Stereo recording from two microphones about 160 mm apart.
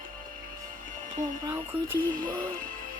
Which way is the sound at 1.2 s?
30° right (ahead or behind).